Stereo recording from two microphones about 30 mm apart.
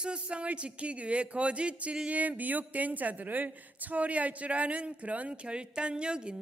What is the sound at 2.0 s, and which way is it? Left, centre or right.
A woman's voice, right.